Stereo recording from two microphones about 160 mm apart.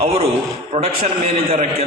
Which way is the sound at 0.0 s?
40° right (ahead or behind).